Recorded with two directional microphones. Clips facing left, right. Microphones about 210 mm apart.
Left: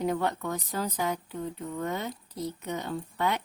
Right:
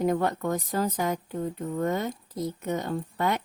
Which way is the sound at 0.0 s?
50° right (ahead or behind).